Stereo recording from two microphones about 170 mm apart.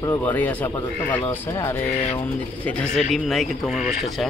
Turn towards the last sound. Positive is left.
turn(degrees=0)  # may be behind; listen again after turning